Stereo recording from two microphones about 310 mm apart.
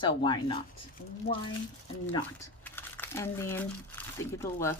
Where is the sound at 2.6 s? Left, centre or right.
Centre.